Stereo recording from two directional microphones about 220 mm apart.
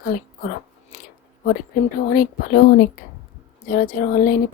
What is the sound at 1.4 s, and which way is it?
A woman's voice, 40° left (ahead or behind).